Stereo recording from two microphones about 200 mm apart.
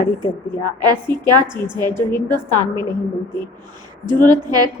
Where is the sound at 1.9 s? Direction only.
10° left (ahead or behind).